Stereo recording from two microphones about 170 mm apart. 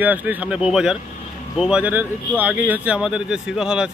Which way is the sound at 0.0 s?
10° right (ahead or behind).